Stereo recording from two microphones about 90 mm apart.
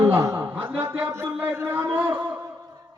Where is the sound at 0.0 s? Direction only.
35° right (ahead or behind).